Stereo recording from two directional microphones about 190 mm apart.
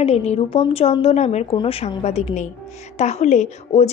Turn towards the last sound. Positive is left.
turn(degrees=35)  # may be behind; listen again after turning